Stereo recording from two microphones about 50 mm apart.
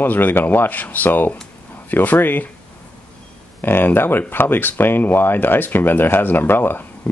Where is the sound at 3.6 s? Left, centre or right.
Left.